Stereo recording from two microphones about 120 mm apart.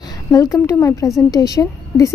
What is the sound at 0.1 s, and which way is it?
A woman's voice, 30° left (ahead or behind).